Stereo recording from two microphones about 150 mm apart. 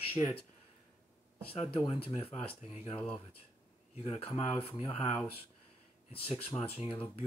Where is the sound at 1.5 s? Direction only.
40° left (ahead or behind).